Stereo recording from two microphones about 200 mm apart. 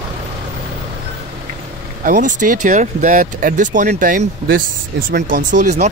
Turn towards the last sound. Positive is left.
turn(degrees=-35)  # may be behind; listen again after turning